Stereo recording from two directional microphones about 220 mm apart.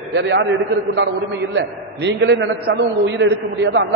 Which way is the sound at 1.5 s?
55° right (ahead or behind).